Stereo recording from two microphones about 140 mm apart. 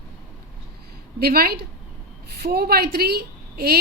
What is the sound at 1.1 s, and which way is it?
A woman's voice, 90° right.